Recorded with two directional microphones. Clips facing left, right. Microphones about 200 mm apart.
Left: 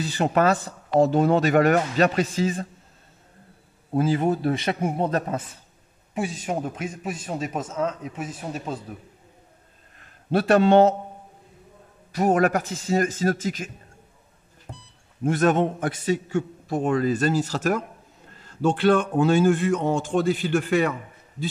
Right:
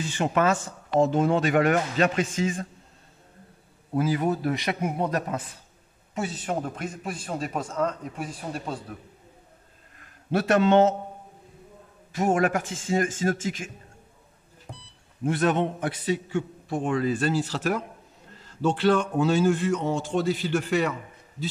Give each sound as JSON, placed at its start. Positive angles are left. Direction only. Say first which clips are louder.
{"t": 0.0, "sound": "speech", "louder": "left 3 dB", "side_deg": 35}
{"t": 3.9, "sound": "a man's voice", "louder": "left 3 dB", "side_deg": 30}
{"t": 6.1, "sound": "speech", "louder": "left 2 dB", "side_deg": 10}
{"t": 10.3, "sound": "speech", "louder": "left 3 dB", "side_deg": 35}
{"t": 12.1, "sound": "speech", "louder": "left 3 dB", "side_deg": 40}
{"t": 15.2, "sound": "a man's voice", "louder": "left 3 dB", "side_deg": 45}